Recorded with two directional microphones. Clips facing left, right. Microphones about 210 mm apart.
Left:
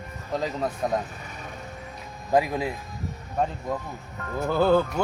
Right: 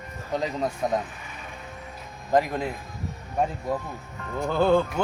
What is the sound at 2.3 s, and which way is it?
Speech, 5° left (ahead or behind).